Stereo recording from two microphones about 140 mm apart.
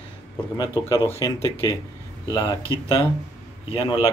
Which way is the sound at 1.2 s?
25° left (ahead or behind).